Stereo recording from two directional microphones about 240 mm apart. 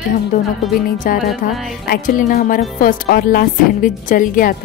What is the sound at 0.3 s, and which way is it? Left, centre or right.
Speech, left.